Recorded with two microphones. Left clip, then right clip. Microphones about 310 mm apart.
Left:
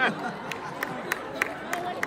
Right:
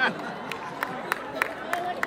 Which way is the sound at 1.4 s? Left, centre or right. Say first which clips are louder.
Even; centre.